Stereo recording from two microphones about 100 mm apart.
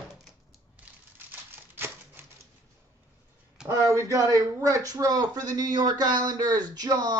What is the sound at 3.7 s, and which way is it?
A man's voice, 30° right (ahead or behind).